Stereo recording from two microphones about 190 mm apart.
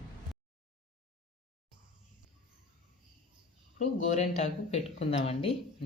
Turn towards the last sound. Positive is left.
turn(degrees=30)  # may be behind; listen again after turning